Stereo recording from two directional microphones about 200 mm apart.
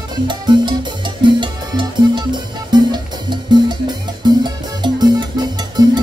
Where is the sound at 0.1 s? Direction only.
25° right (ahead or behind).